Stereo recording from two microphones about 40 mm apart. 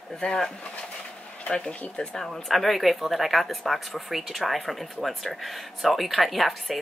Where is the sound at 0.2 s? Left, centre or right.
Centre.